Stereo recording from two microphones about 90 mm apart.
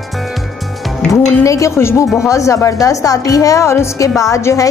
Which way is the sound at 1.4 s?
35° left (ahead or behind).